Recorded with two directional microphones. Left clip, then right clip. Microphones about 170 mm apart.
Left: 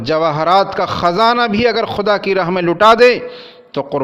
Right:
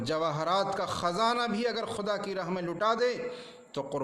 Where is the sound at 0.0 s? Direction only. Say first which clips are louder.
Left 16 dB; 30° left (ahead or behind).